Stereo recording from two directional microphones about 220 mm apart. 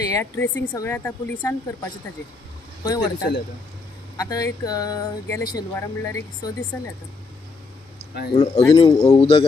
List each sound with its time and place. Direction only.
0.1 s speech: 10° left (ahead or behind)
7.9 s a sound: 45° left (ahead or behind)
8.3 s a man's voice: 30° left (ahead or behind)